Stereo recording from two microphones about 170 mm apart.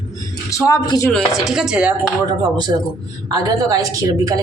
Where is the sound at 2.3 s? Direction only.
25° right (ahead or behind).